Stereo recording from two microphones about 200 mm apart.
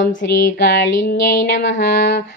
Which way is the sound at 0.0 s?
60° left (ahead or behind).